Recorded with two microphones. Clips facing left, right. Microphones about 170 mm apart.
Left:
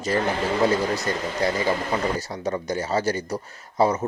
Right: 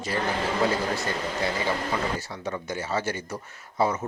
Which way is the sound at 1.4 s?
40° left (ahead or behind).